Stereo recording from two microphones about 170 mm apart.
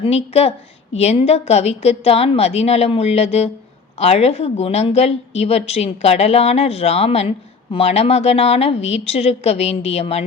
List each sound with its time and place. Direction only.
0.0 s a woman's voice: 35° left (ahead or behind)